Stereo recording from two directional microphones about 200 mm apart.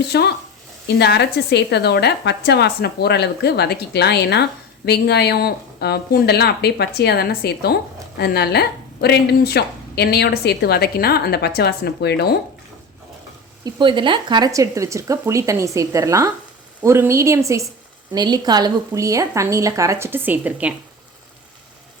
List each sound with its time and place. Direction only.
0.1 s a woman's voice: 55° left (ahead or behind)
13.7 s speech: 25° right (ahead or behind); by 20.7 s 10° right (ahead or behind)